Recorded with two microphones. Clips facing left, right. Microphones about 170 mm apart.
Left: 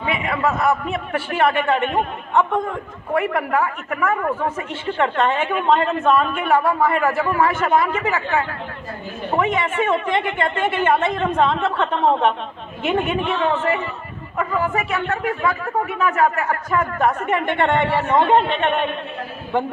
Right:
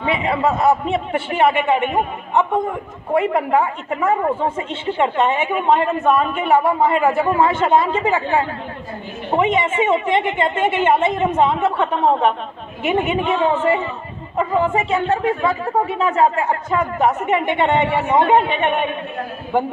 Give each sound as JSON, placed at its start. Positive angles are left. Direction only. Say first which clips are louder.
{"t": 0.0, "sound": "speech", "louder": "right 3 dB", "side_deg": -30}
{"t": 1.3, "sound": "a woman's voice", "louder": "right 2 dB", "side_deg": -15}
{"t": 13.1, "sound": "speech", "louder": "right 3 dB", "side_deg": -20}